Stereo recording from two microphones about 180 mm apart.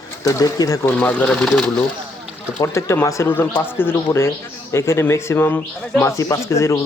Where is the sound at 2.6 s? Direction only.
15° left (ahead or behind).